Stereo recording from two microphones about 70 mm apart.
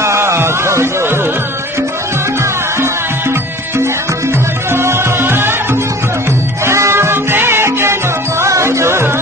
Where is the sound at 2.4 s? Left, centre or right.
Right.